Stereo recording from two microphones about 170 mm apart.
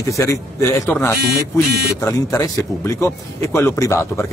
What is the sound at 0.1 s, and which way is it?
Speech, 20° left (ahead or behind).